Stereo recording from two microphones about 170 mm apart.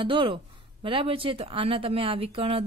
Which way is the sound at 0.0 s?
30° right (ahead or behind).